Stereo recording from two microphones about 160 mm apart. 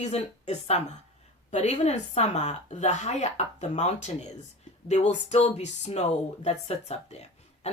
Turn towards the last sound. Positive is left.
turn(degrees=40)  # may be behind; listen again after turning